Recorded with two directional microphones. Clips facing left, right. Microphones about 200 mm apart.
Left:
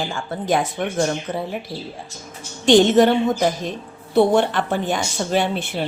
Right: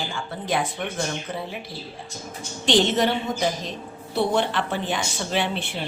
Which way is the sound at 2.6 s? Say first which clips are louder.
Left 7 dB; 50° left (ahead or behind).